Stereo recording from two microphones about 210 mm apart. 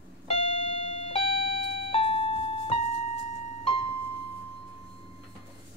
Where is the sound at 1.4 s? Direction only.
60° right (ahead or behind).